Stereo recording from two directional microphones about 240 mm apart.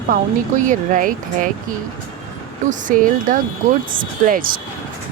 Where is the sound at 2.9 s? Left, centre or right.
Right.